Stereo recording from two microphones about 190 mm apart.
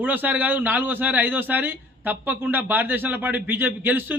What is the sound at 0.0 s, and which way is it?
Speech, 10° right (ahead or behind).